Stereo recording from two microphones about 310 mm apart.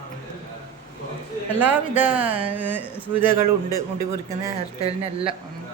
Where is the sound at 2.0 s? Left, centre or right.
Centre.